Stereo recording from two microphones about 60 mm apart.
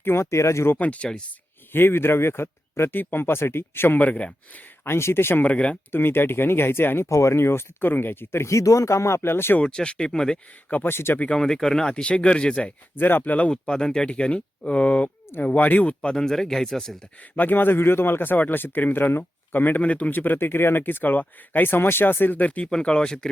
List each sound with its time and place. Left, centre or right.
0.0 s speech: left
0.8 s speech: left
1.7 s speech: left
4.9 s speech: left
5.4 s speech: left
5.9 s speech: left
7.1 s speech: left
9.6 s speech: centre
10.7 s speech: left
10.9 s speech: left
11.3 s speech: centre
13.0 s speech: left
13.5 s speech: centre
17.3 s speech: left; by 23.3 s centre